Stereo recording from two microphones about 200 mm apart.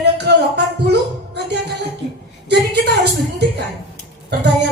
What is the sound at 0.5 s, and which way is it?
Music, 55° right (ahead or behind).